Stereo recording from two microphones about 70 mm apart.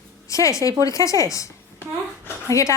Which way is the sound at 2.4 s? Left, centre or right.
Left.